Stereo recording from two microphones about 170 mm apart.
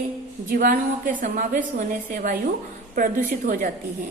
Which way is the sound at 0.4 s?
55° right (ahead or behind).